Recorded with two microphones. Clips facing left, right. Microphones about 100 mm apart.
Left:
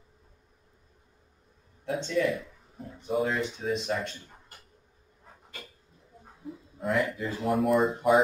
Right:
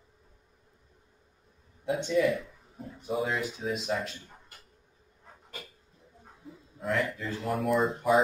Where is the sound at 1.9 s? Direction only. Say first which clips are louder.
Right 1 dB; 10° right (ahead or behind).